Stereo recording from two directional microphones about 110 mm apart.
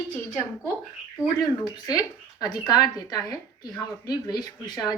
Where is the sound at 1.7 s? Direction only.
35° left (ahead or behind).